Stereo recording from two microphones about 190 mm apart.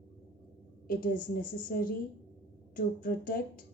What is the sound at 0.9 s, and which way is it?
A woman's voice, 50° left (ahead or behind).